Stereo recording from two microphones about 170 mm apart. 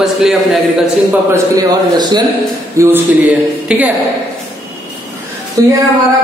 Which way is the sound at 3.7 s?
5° right (ahead or behind).